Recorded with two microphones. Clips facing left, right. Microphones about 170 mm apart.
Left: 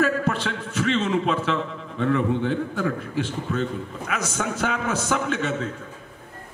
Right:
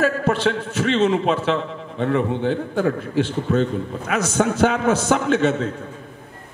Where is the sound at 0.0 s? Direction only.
30° right (ahead or behind).